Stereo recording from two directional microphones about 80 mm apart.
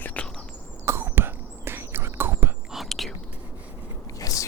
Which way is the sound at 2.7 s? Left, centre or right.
Centre.